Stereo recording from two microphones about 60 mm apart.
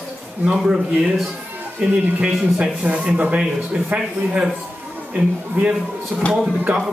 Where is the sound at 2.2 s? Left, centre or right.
Centre.